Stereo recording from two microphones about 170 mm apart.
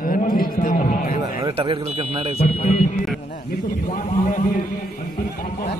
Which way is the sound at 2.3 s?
35° left (ahead or behind).